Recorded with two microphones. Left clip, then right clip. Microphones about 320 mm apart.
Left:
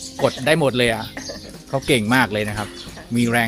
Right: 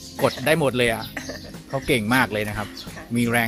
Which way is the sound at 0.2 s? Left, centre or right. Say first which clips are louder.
Left 2 dB; right.